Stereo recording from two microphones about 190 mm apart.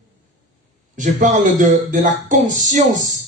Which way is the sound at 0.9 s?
40° right (ahead or behind).